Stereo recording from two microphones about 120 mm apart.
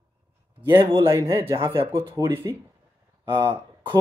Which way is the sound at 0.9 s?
25° right (ahead or behind).